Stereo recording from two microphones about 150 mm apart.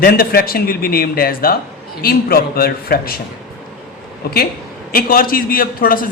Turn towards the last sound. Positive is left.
turn(degrees=75)  # may be behind; listen again after turning